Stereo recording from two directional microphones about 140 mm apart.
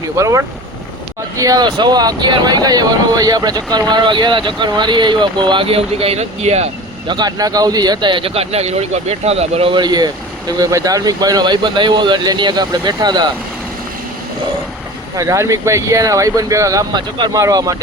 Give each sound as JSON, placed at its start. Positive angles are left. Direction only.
{"t": 0.2, "sound": "speech", "side_deg": -20}
{"t": 7.1, "sound": "speech", "side_deg": -30}
{"t": 15.1, "sound": "speech", "side_deg": -25}